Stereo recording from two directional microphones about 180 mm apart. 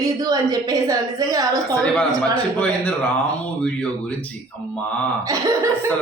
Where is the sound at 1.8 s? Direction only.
5° left (ahead or behind).